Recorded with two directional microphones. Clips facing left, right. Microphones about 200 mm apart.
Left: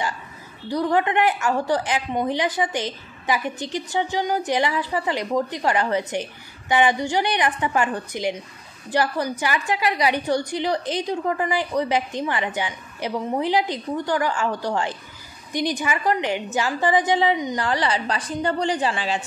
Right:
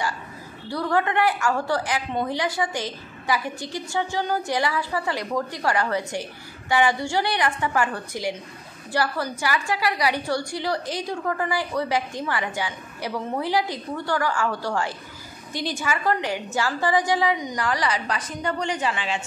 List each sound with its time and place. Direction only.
0.7 s a woman's voice: 20° left (ahead or behind); by 19.2 s 35° left (ahead or behind)